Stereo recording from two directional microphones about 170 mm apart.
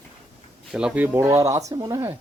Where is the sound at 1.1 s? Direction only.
15° right (ahead or behind).